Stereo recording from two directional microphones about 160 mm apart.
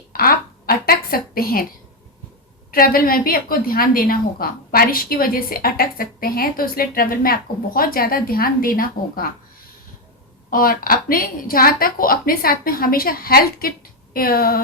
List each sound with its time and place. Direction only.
0.1 s a sound: 65° left (ahead or behind)
2.7 s a woman's voice: 65° left (ahead or behind)
10.5 s a woman's voice: 65° left (ahead or behind)